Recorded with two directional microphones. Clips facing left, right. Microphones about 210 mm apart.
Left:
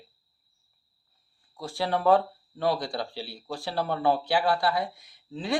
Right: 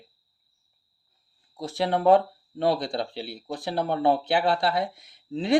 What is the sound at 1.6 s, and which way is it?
Speech, 20° right (ahead or behind).